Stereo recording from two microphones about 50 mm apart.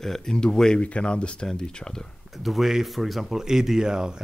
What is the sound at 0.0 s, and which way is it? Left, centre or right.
Speech, centre.